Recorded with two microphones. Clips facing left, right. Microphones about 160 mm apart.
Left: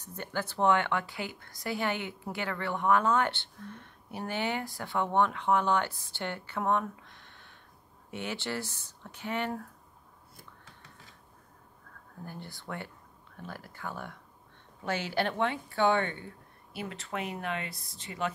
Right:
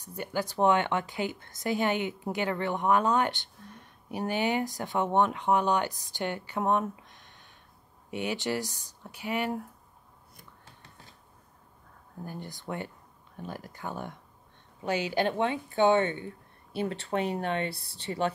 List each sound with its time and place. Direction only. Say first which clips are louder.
0.0 s speech: right 3 dB; 10° right (ahead or behind)
12.3 s a woman's voice: right 4 dB; 15° right (ahead or behind); by 18.3 s 30° right (ahead or behind)